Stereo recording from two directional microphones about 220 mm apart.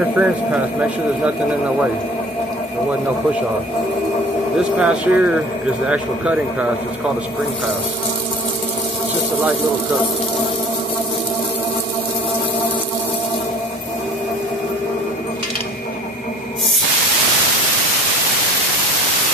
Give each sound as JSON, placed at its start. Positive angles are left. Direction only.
{"t": 0.2, "sound": "speech", "side_deg": -5}
{"t": 4.7, "sound": "speech", "side_deg": -5}